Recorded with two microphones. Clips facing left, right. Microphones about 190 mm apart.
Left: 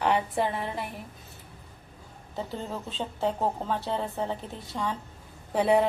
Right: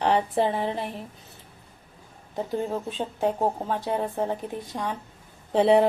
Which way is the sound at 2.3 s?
15° right (ahead or behind).